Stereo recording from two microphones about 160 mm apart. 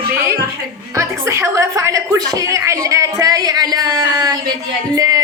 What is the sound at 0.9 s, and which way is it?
A woman's voice, 15° right (ahead or behind).